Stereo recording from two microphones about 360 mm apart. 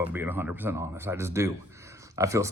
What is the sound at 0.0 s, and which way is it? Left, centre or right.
Speech, centre.